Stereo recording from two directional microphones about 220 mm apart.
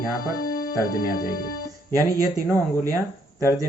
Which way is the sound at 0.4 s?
45° left (ahead or behind).